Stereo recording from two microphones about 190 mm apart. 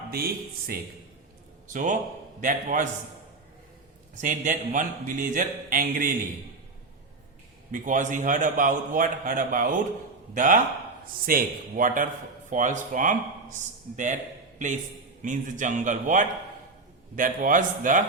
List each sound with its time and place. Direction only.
0.1 s a man's voice: 55° right (ahead or behind)
1.7 s a man's voice: 40° right (ahead or behind)
4.2 s a man's voice: 45° right (ahead or behind)
7.7 s a man's voice: 45° right (ahead or behind)
15.2 s a man's voice: 40° right (ahead or behind)